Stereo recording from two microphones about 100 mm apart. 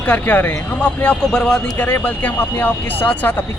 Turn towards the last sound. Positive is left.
turn(degrees=15)  # may be behind; listen again after turning